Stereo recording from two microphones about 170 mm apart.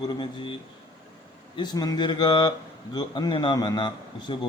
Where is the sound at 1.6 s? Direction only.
25° left (ahead or behind).